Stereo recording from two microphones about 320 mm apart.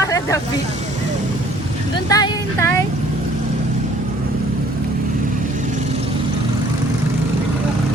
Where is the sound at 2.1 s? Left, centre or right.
Centre.